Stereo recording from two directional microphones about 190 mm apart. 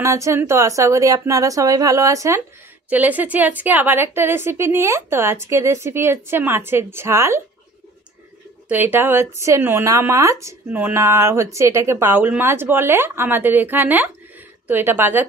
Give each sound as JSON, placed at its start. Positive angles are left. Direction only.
{"t": 0.0, "sound": "speech", "side_deg": -15}
{"t": 8.6, "sound": "speech", "side_deg": -10}